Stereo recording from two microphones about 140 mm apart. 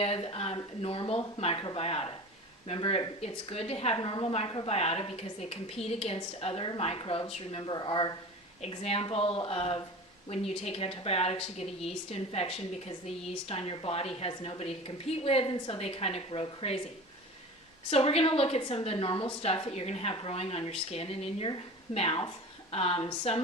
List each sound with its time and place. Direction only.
0.0 s a woman's voice: 45° left (ahead or behind)
8.7 s a woman's voice: 45° left (ahead or behind)
17.9 s a woman's voice: 45° left (ahead or behind)